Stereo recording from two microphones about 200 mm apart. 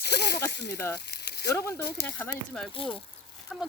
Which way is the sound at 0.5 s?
60° left (ahead or behind).